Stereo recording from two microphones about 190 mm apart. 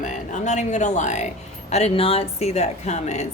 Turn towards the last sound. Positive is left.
turn(degrees=35)  # may be behind; listen again after turning